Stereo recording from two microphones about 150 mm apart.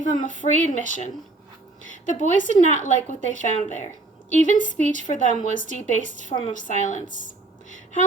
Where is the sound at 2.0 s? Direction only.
60° left (ahead or behind).